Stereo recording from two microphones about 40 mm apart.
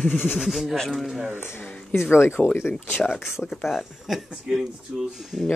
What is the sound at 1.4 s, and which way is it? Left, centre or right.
Speech, left.